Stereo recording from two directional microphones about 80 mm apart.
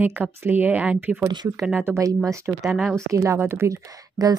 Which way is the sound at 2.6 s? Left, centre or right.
Centre.